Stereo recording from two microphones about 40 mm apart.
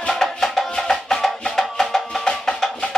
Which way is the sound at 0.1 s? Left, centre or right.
Centre.